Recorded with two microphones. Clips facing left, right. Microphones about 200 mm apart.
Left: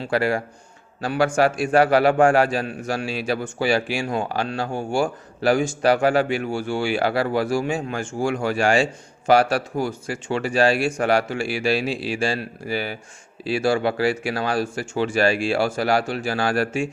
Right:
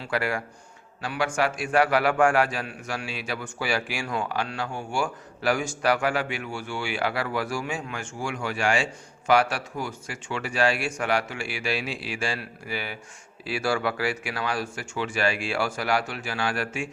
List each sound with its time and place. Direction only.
0.0 s a man's voice: 30° left (ahead or behind)